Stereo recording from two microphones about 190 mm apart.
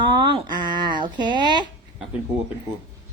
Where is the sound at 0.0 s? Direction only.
25° right (ahead or behind).